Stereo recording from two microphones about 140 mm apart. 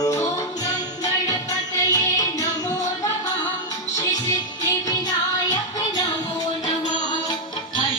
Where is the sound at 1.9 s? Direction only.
25° left (ahead or behind).